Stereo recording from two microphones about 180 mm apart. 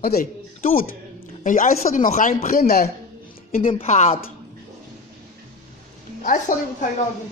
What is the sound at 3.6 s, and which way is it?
Speech, 30° left (ahead or behind).